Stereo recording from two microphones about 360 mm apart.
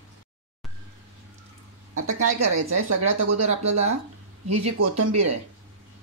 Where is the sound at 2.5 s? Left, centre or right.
Right.